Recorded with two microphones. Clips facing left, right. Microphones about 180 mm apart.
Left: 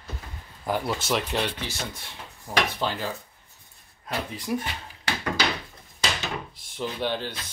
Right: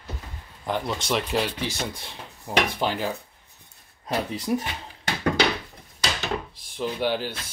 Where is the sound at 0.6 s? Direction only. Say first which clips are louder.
Even; 5° left (ahead or behind).